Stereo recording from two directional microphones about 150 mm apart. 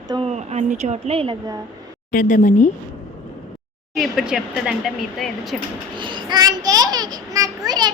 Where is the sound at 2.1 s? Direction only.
65° left (ahead or behind).